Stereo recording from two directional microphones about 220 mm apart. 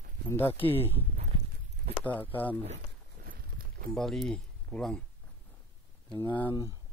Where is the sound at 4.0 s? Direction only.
Centre (ahead or behind).